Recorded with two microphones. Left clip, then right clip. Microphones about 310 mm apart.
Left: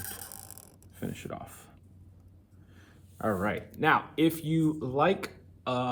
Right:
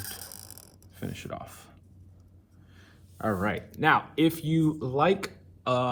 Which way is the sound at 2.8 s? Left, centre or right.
Right.